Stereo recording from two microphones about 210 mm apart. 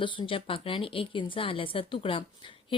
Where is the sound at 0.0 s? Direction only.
25° left (ahead or behind).